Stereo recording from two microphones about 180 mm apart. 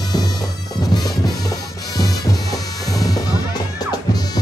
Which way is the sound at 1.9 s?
20° left (ahead or behind).